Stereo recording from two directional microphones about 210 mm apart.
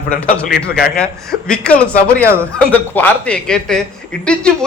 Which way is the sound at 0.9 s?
5° left (ahead or behind).